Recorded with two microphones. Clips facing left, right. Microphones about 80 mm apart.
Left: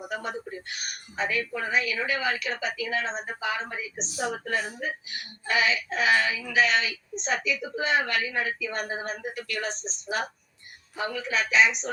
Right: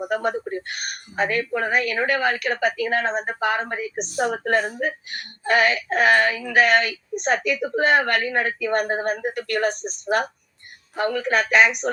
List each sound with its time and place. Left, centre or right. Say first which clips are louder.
0.0 s speech: right 9 dB; right